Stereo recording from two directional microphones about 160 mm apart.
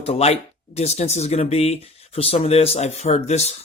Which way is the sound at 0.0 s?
40° left (ahead or behind).